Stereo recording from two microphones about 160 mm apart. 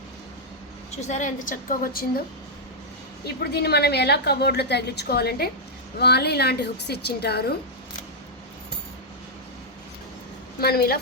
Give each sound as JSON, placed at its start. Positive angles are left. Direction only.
{"t": 0.9, "sound": "a woman's voice", "side_deg": 45}
{"t": 3.2, "sound": "a woman's voice", "side_deg": 80}
{"t": 6.0, "sound": "a woman's voice", "side_deg": 90}
{"t": 10.6, "sound": "a woman's voice", "side_deg": 75}